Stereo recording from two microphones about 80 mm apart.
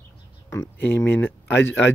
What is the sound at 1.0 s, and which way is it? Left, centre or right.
Speech, left.